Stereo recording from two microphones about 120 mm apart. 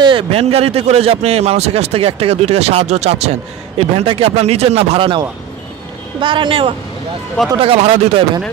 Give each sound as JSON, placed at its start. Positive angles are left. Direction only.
{"t": 0.0, "sound": "speech", "side_deg": -50}